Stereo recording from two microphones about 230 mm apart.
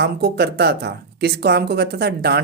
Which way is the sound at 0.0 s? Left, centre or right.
Right.